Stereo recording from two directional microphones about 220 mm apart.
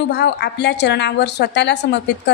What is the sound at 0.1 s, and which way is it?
A woman's voice, 50° left (ahead or behind).